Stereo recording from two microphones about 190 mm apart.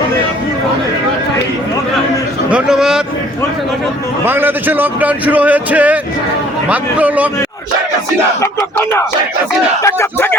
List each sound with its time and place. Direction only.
2.5 s a man's voice: 5° right (ahead or behind)
4.3 s speech: 10° right (ahead or behind)
8.4 s speech: 15° left (ahead or behind)